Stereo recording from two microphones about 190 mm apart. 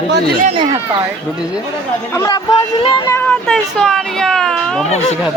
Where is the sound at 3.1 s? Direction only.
10° left (ahead or behind).